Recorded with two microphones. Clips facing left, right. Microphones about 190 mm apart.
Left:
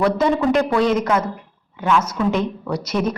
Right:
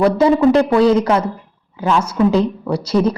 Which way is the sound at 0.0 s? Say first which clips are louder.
Right 5 dB; 30° right (ahead or behind).